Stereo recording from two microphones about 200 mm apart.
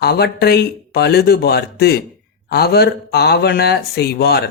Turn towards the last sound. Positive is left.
turn(degrees=55)  # may be behind; listen again after turning